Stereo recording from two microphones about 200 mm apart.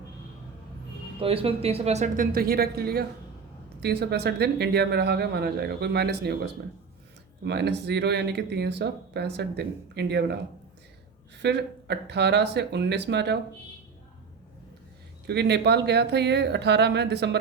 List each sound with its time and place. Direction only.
1.2 s speech: 30° right (ahead or behind); by 10.3 s 55° right (ahead or behind)
11.4 s speech: 55° right (ahead or behind)
15.3 s speech: 55° right (ahead or behind)